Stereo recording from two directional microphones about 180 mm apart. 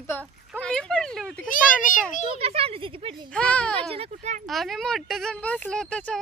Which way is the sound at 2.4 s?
35° right (ahead or behind).